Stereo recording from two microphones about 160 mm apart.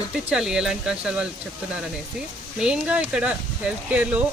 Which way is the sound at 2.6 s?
5° right (ahead or behind).